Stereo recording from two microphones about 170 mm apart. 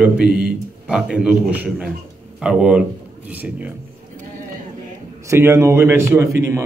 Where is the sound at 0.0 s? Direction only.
5° right (ahead or behind).